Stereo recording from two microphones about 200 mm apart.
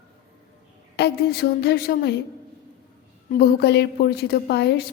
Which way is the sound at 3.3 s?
50° left (ahead or behind).